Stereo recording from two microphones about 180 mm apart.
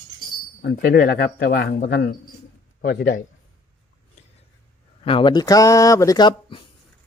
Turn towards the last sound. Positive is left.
turn(degrees=25)  # may be behind; listen again after turning